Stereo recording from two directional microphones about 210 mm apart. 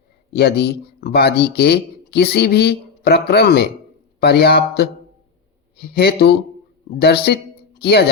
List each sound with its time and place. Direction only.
0.3 s speech: 50° left (ahead or behind)